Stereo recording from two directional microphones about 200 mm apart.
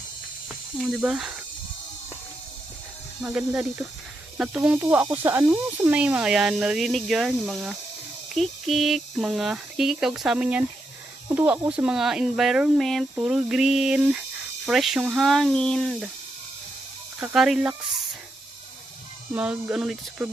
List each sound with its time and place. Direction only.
0.4 s speech: centre (ahead or behind)
3.2 s speech: 5° right (ahead or behind)
17.2 s speech: 5° right (ahead or behind)
19.3 s speech: 5° right (ahead or behind)